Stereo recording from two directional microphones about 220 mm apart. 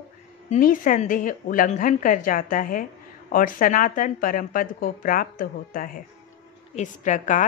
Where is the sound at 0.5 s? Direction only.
40° left (ahead or behind).